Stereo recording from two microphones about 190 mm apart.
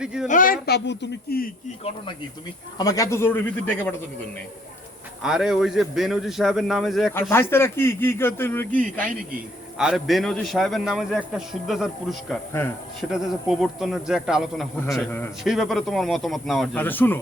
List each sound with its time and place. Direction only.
0.0 s a man's voice: 5° right (ahead or behind)
0.3 s speech: 45° left (ahead or behind)
2.7 s a man's voice: 20° left (ahead or behind)
5.2 s a man's voice: 5° right (ahead or behind)
7.1 s a man's voice: 10° left (ahead or behind)
9.7 s a man's voice: 5° right (ahead or behind)
12.3 s a man's voice: 10° left (ahead or behind)
13.0 s a man's voice: centre (ahead or behind)